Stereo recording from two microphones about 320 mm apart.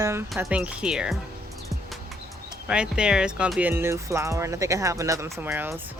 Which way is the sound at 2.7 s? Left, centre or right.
Centre.